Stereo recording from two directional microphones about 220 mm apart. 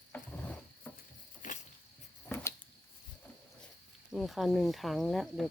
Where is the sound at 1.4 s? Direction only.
35° left (ahead or behind).